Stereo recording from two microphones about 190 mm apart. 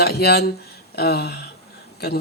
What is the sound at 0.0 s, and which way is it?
A man's voice, 55° left (ahead or behind).